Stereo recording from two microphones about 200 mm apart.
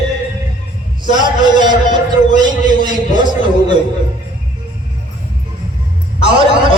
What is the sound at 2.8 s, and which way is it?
Speech, 40° left (ahead or behind).